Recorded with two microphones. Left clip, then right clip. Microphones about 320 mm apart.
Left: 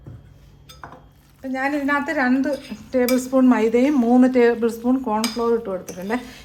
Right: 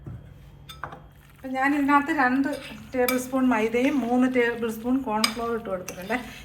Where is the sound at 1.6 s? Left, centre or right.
Left.